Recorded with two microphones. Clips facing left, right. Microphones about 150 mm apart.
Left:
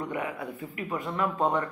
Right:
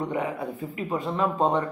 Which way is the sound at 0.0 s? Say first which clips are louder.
Right 4 dB; 25° right (ahead or behind).